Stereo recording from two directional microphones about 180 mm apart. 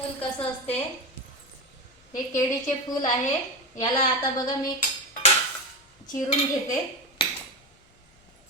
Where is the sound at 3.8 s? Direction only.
25° left (ahead or behind).